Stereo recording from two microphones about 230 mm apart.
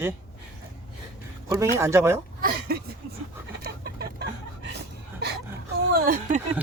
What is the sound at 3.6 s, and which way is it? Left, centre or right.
Chicken, right.